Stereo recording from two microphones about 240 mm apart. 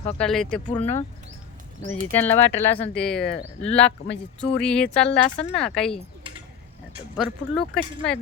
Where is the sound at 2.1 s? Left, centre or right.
Centre.